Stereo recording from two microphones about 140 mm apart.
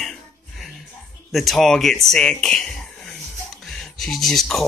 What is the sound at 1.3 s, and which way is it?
Speech, centre (ahead or behind).